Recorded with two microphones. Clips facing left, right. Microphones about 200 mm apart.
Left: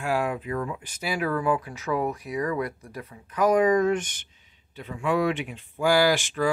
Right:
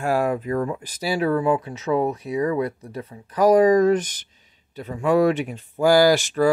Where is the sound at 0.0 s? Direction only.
40° right (ahead or behind).